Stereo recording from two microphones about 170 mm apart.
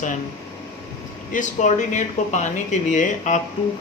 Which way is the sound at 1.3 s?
45° left (ahead or behind).